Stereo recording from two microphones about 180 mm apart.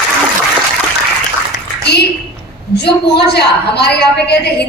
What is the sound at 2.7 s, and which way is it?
A woman's voice, 70° left (ahead or behind).